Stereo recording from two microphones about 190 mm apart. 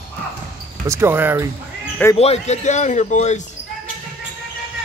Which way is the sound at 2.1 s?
35° left (ahead or behind).